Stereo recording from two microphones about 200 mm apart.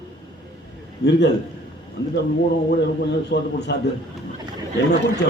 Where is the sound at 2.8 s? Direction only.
55° left (ahead or behind).